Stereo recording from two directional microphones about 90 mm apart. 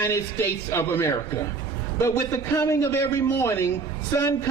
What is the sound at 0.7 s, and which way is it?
Speech, 30° left (ahead or behind).